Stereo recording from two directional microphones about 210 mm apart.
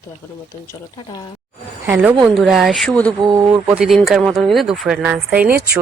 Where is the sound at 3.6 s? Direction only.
5° right (ahead or behind).